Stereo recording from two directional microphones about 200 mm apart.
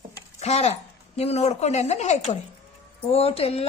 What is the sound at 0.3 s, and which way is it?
Speech, 35° left (ahead or behind).